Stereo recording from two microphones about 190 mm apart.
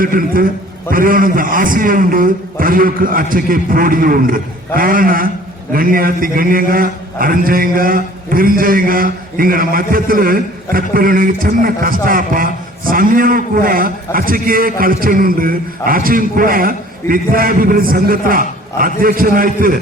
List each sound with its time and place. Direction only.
0.0 s a man's voice: 50° right (ahead or behind)